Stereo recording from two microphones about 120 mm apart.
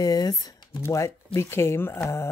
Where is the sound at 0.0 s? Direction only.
30° left (ahead or behind).